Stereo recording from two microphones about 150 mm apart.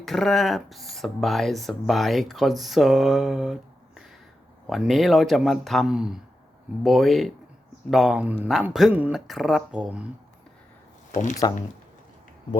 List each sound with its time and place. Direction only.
0.0 s speech: centre (ahead or behind)
11.1 s speech: 55° left (ahead or behind)